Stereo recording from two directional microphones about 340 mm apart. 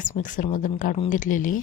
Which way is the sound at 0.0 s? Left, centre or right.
Left.